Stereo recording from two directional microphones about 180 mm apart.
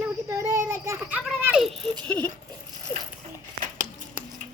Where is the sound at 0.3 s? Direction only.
15° right (ahead or behind).